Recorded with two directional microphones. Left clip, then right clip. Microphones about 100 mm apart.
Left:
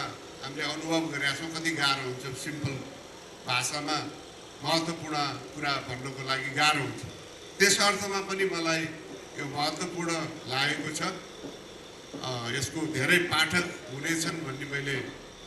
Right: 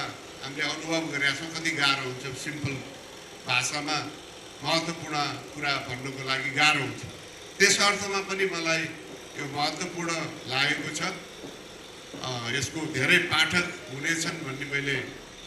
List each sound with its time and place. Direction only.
0.0 s a man's voice: 20° left (ahead or behind)
12.2 s a man's voice: 20° left (ahead or behind)